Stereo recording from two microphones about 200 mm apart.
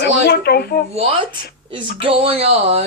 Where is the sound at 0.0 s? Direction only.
55° left (ahead or behind).